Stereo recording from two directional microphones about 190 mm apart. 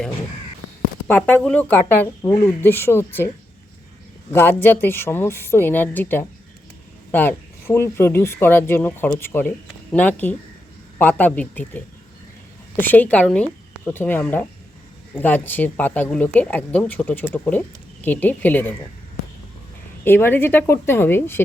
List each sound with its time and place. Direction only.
1.0 s speech: 10° left (ahead or behind)
4.3 s speech: 10° left (ahead or behind)
20.1 s speech: 10° left (ahead or behind)